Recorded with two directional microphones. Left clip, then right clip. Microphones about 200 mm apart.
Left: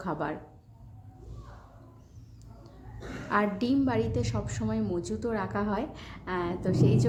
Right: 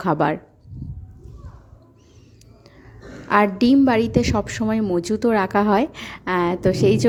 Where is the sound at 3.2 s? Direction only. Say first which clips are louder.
Right 11 dB; 45° right (ahead or behind).